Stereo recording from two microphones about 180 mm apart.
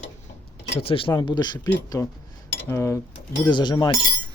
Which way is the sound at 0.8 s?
30° left (ahead or behind).